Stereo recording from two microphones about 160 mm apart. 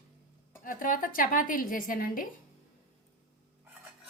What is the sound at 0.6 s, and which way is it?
Speech, 60° left (ahead or behind).